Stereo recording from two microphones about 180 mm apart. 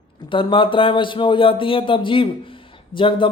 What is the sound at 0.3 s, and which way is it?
Speech, 30° left (ahead or behind).